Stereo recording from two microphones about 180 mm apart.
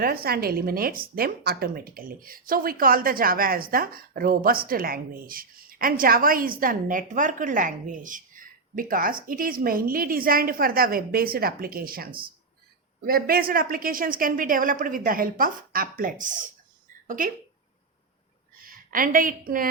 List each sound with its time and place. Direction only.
0.0 s a woman's voice: 55° right (ahead or behind)
18.6 s a woman's voice: 50° right (ahead or behind)